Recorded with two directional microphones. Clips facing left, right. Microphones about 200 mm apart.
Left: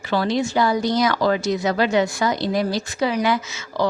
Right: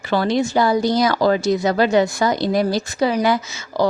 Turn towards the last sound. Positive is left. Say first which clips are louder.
# right 3 dB
turn(degrees=-40)  # may be behind; listen again after turning